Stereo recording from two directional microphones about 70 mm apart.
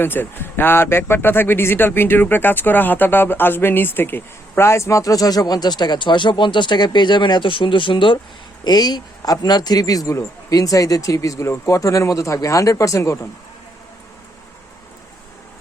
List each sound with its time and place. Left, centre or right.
0.0 s speech: left
8.6 s a man's voice: left